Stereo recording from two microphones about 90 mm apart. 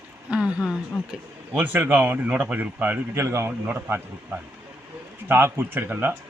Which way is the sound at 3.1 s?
30° right (ahead or behind).